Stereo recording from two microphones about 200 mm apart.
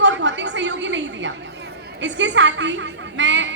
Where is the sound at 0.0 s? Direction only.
65° right (ahead or behind).